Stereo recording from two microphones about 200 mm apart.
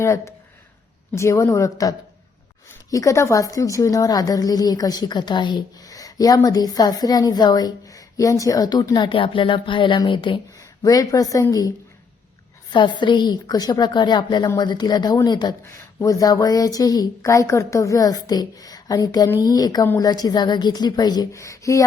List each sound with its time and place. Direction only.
0.0 s a woman's voice: 15° left (ahead or behind)
12.7 s a woman's voice: 25° left (ahead or behind)